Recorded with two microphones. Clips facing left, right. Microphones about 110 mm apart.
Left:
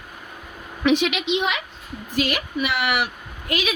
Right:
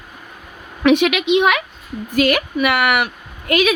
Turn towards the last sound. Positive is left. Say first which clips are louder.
# right 9 dB
turn(degrees=-60)  # may be behind; listen again after turning